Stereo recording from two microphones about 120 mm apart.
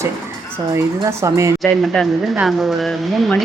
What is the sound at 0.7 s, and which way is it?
Speech, 25° right (ahead or behind).